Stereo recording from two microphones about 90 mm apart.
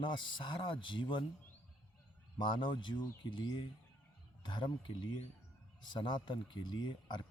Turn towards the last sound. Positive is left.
turn(degrees=55)  # may be behind; listen again after turning